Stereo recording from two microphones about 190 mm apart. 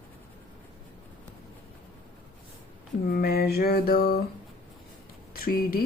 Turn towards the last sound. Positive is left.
turn(degrees=50)  # may be behind; listen again after turning